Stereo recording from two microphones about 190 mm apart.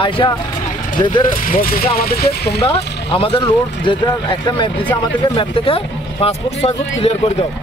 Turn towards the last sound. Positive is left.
turn(degrees=35)  # may be behind; listen again after turning